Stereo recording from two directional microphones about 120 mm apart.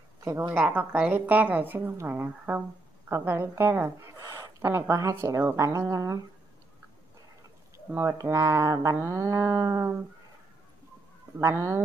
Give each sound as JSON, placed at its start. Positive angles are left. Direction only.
{"t": 0.2, "sound": "a woman's voice", "side_deg": -15}
{"t": 7.7, "sound": "a woman's voice", "side_deg": -20}
{"t": 11.3, "sound": "a woman's voice", "side_deg": -25}